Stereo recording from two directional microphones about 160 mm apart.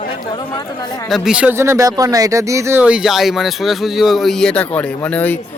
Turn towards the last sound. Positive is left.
turn(degrees=10)  # may be behind; listen again after turning